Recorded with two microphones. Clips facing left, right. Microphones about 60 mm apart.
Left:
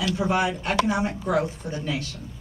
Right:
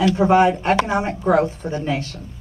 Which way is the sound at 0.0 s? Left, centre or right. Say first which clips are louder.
Right 9 dB; right.